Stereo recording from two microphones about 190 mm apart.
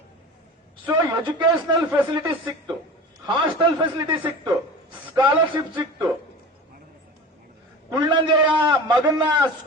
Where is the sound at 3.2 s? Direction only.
25° right (ahead or behind).